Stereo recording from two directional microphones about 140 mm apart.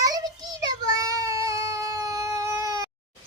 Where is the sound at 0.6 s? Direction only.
25° right (ahead or behind).